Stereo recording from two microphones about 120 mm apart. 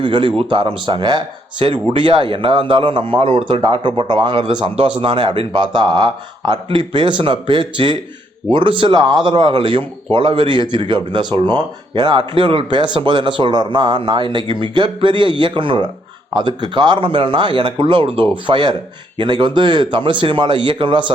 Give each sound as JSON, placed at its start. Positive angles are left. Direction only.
{"t": 0.0, "sound": "speech", "side_deg": -45}